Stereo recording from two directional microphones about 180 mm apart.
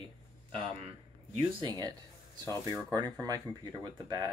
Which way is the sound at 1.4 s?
20° right (ahead or behind).